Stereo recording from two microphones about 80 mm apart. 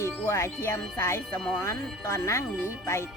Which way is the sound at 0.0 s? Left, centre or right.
Left.